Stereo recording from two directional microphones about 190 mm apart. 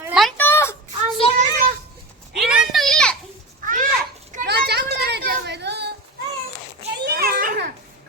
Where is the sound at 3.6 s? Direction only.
45° right (ahead or behind).